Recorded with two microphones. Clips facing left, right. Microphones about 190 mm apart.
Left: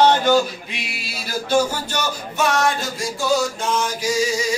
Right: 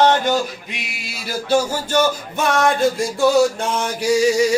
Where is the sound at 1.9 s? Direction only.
55° right (ahead or behind).